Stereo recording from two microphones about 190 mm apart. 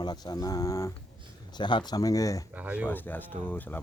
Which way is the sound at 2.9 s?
10° left (ahead or behind).